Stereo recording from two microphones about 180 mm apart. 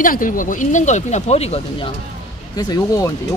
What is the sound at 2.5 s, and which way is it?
Speech, 20° left (ahead or behind).